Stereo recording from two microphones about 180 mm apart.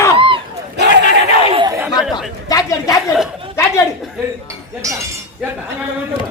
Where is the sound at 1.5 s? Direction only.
30° right (ahead or behind).